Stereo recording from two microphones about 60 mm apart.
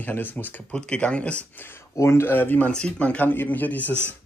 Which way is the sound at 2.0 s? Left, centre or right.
Left.